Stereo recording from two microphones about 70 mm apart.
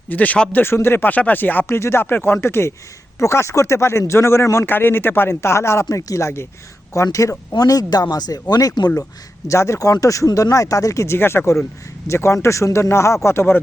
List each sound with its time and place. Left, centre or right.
0.1 s speech: left
0.5 s speech: left
1.6 s speech: left
5.9 s speech: left
7.5 s speech: left
9.5 s speech: left